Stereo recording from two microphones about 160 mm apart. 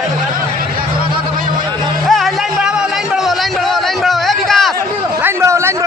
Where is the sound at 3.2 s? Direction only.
Centre (ahead or behind).